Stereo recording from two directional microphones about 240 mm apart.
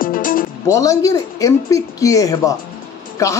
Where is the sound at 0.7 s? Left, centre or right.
Centre.